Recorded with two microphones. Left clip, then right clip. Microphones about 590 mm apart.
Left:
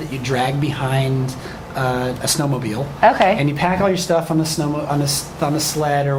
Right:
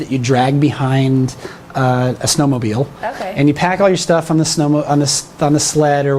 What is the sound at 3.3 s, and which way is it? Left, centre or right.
A man's voice, right.